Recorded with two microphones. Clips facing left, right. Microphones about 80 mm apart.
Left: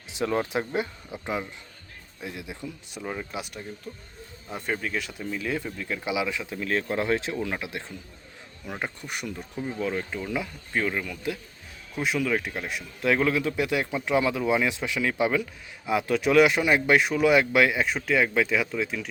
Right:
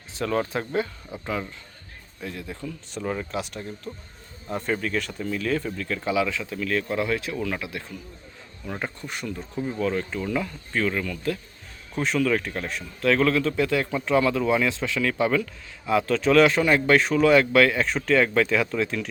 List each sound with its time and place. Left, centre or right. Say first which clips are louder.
0.1 s speech: right 1 dB; centre
3.0 s speech: right 4 dB; centre